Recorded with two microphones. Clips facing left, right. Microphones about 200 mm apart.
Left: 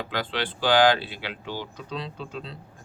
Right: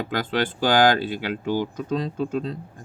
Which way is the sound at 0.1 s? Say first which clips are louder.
Right 5 dB; 45° right (ahead or behind).